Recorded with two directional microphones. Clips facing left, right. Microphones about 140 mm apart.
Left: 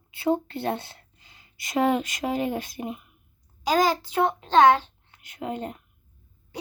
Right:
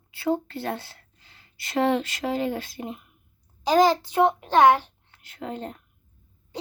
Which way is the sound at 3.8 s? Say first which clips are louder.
Right 4 dB; 20° right (ahead or behind).